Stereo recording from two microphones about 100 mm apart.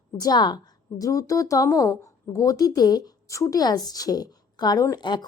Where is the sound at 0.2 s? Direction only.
45° left (ahead or behind).